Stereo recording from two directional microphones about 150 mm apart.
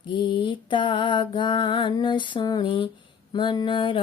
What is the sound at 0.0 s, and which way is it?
Music, 30° left (ahead or behind).